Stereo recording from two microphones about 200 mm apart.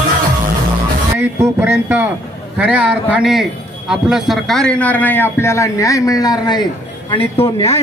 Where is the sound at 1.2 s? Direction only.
10° right (ahead or behind).